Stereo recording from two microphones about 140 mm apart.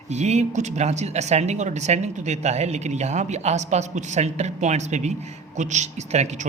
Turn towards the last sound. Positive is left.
turn(degrees=-55)  # may be behind; listen again after turning